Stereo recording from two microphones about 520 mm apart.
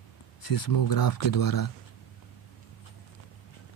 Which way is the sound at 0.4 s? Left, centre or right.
Left.